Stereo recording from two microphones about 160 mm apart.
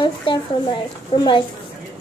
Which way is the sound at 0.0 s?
30° left (ahead or behind).